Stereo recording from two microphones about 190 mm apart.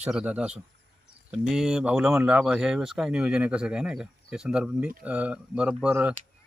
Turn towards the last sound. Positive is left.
turn(degrees=-5)  # may be behind; listen again after turning